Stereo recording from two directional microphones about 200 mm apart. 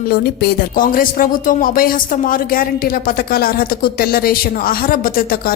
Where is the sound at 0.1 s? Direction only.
50° left (ahead or behind).